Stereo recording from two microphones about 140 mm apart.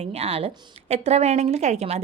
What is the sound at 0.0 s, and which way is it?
Speech, 45° right (ahead or behind).